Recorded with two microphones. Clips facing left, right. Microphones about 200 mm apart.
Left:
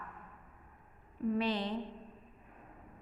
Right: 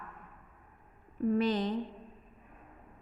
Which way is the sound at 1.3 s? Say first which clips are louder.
Right 4 dB; 45° right (ahead or behind).